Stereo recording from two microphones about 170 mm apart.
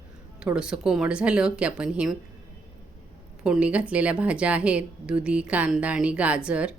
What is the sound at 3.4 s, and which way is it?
A woman's voice, 5° right (ahead or behind).